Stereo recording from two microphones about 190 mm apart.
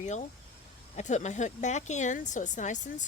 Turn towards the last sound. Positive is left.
turn(degrees=40)  # may be behind; listen again after turning